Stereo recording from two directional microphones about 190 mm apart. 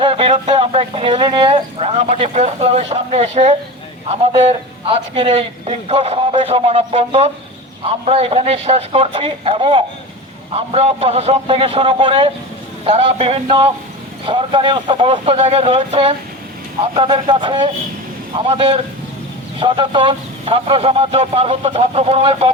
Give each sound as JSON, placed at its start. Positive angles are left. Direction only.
{"t": 0.0, "sound": "speech", "side_deg": -30}